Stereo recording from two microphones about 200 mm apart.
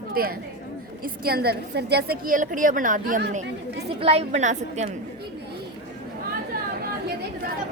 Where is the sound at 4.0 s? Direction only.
30° right (ahead or behind).